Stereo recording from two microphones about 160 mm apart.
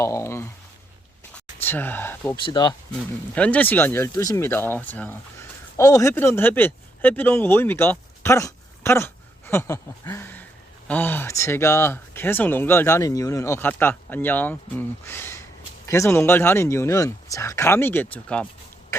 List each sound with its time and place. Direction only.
0.0 s speech: 20° left (ahead or behind)
1.6 s speech: 10° left (ahead or behind)
2.3 s speech: 25° left (ahead or behind)
2.9 s speech: 10° left (ahead or behind)